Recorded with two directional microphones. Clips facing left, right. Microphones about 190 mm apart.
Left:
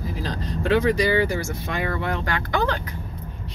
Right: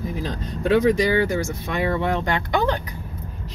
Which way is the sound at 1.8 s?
20° right (ahead or behind).